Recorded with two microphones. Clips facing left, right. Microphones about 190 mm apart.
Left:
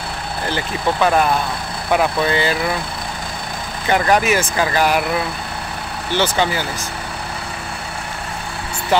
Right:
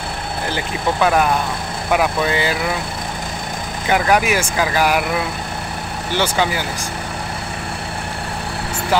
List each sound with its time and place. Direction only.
0.9 s speech: 5° right (ahead or behind)
3.9 s speech: 10° right (ahead or behind)
6.1 s speech: 10° right (ahead or behind)